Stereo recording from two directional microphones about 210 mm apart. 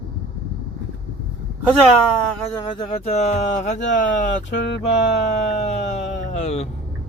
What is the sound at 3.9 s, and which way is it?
Speech, 55° left (ahead or behind).